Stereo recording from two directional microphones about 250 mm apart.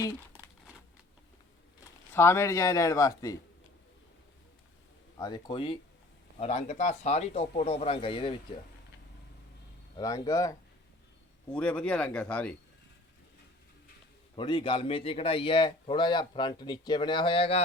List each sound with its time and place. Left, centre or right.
2.1 s speech: centre
5.1 s a man's voice: centre
10.0 s speech: centre
14.3 s a man's voice: centre